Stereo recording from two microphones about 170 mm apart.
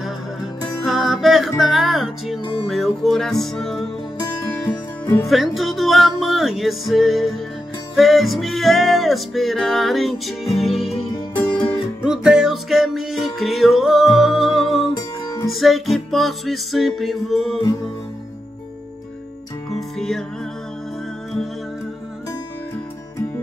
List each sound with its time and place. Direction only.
0.8 s music: centre (ahead or behind)
5.0 s speech: 10° left (ahead or behind)
5.3 s music: centre (ahead or behind)
11.3 s music: 10° left (ahead or behind)
12.0 s music: 5° right (ahead or behind)
15.0 s music: 20° left (ahead or behind)
15.5 s music: centre (ahead or behind)
19.7 s music: 5° left (ahead or behind)